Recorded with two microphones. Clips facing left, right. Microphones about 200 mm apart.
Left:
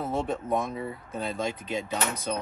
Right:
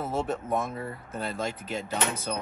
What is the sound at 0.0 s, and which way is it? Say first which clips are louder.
Speech: even; centre (ahead or behind).